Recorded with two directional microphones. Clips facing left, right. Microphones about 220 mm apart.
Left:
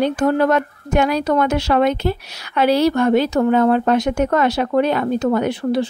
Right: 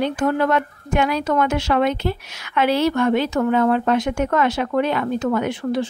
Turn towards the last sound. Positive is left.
turn(degrees=35)  # may be behind; listen again after turning